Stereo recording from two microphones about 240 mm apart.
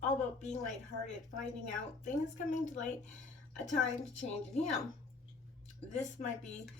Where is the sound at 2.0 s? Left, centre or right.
Left.